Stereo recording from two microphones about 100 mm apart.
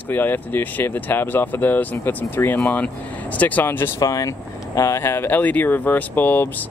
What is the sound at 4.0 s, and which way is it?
Speech, 35° left (ahead or behind).